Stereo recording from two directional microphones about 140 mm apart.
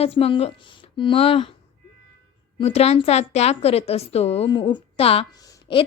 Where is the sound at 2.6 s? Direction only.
50° left (ahead or behind).